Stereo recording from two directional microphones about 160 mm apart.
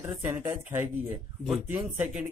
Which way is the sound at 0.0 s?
10° right (ahead or behind).